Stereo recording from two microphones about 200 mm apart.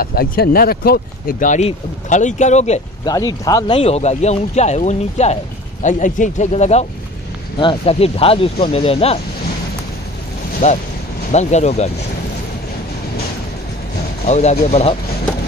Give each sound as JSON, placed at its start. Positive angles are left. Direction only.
{"t": 0.0, "sound": "speech", "side_deg": 50}
{"t": 3.1, "sound": "speech", "side_deg": 20}
{"t": 10.6, "sound": "speech", "side_deg": 35}
{"t": 14.2, "sound": "speech", "side_deg": 35}